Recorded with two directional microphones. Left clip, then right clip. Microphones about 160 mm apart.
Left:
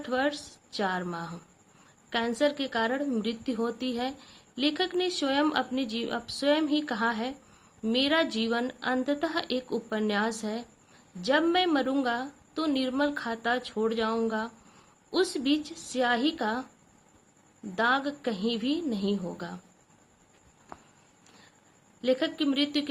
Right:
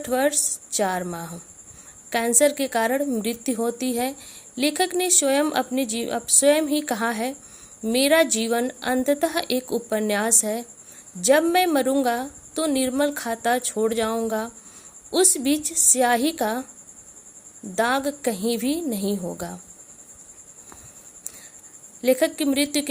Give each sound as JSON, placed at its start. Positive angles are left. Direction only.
{"t": 0.0, "sound": "a woman's voice", "side_deg": -50}
{"t": 17.7, "sound": "a woman's voice", "side_deg": -50}
{"t": 22.0, "sound": "a woman's voice", "side_deg": -55}